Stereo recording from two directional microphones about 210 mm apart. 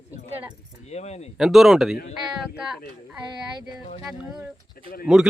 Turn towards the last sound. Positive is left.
turn(degrees=0)  # may be behind; listen again after turning